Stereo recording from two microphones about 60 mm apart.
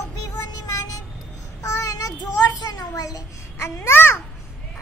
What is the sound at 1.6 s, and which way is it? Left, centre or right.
Child singing, left.